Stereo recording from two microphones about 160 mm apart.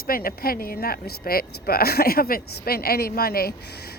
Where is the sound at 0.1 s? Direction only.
65° left (ahead or behind).